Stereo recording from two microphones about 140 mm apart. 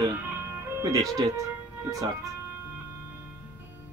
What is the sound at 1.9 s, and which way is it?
Music, 20° right (ahead or behind).